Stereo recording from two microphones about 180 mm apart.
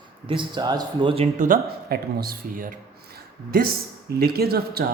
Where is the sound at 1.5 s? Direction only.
55° right (ahead or behind).